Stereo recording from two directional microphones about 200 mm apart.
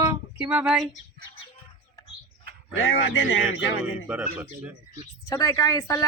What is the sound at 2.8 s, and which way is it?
Speech, 80° left.